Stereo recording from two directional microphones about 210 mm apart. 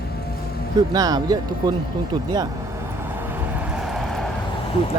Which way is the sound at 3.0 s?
10° right (ahead or behind).